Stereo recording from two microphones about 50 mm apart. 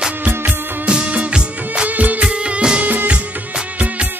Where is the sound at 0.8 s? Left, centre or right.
Right.